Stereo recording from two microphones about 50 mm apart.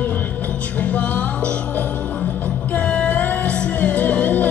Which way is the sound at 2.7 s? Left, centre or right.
Left.